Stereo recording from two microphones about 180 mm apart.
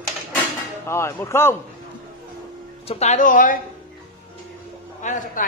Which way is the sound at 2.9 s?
40° left (ahead or behind).